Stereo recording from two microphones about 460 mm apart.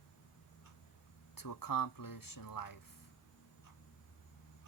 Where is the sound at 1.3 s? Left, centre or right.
Left.